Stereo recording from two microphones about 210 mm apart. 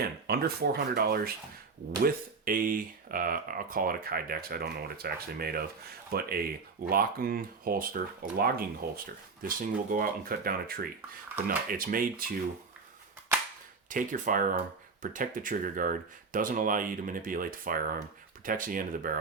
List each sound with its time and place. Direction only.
0.0 s speech: 50° right (ahead or behind)
13.9 s speech: 40° right (ahead or behind)